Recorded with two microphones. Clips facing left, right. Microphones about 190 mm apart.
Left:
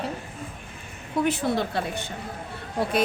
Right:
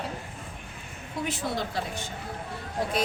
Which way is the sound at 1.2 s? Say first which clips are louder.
Left 6 dB; 60° left (ahead or behind).